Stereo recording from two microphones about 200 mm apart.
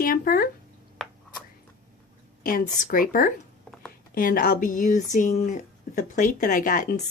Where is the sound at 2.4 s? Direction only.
45° left (ahead or behind).